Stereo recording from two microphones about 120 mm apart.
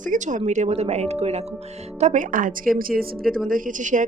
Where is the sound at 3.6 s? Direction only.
90° right.